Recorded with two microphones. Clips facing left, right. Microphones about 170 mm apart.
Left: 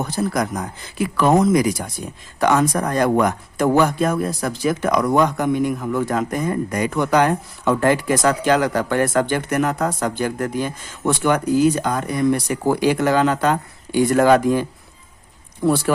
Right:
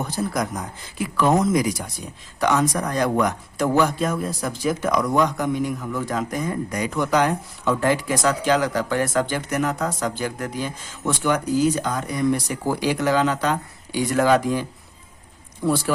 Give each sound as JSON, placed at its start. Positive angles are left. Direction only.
{"t": 1.1, "sound": "speech", "side_deg": 65}